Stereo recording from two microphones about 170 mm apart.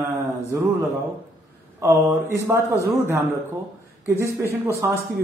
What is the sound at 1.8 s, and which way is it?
A man's voice, 15° right (ahead or behind).